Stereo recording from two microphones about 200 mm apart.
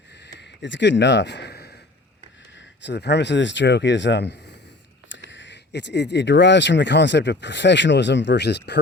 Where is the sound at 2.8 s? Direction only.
60° left (ahead or behind).